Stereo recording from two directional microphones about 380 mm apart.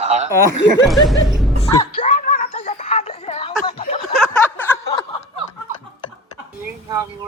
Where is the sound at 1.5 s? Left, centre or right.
Centre.